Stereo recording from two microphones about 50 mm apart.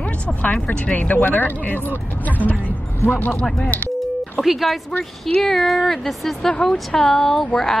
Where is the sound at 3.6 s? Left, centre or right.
Left.